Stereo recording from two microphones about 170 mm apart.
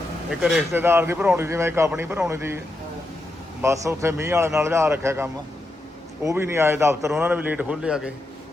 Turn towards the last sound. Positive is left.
turn(degrees=-5)  # may be behind; listen again after turning